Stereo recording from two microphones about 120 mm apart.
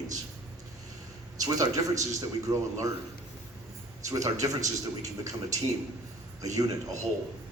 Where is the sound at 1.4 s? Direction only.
30° right (ahead or behind).